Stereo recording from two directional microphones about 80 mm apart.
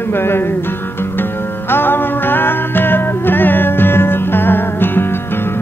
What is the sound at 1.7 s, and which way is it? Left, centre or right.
Music, left.